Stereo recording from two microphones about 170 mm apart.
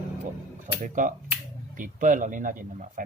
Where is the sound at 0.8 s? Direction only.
50° right (ahead or behind).